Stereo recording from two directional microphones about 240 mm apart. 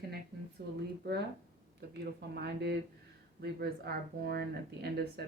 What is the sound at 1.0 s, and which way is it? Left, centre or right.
Speech, right.